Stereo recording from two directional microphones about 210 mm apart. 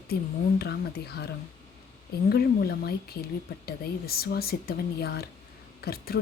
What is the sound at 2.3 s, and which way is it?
Speech, 50° left (ahead or behind).